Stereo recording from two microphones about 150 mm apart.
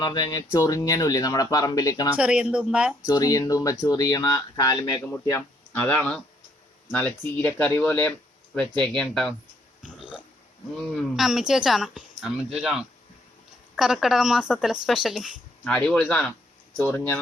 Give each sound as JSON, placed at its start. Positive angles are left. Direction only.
{"t": 0.0, "sound": "speech", "side_deg": 25}
{"t": 2.1, "sound": "a woman's voice", "side_deg": -5}
{"t": 3.1, "sound": "speech", "side_deg": 25}
{"t": 5.1, "sound": "speech", "side_deg": 15}
{"t": 9.8, "sound": "burping", "side_deg": -5}
{"t": 10.9, "sound": "speech", "side_deg": 0}